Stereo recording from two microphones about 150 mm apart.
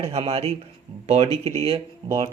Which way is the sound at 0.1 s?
40° right (ahead or behind).